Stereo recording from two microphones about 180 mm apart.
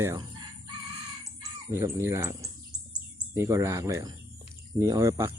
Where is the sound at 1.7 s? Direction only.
15° right (ahead or behind).